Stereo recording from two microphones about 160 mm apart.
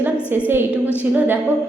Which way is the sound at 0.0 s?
10° right (ahead or behind).